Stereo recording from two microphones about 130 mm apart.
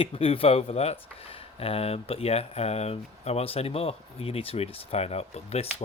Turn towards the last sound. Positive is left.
turn(degrees=55)  # may be behind; listen again after turning